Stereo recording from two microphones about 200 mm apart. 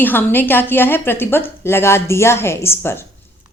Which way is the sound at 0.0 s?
10° left (ahead or behind).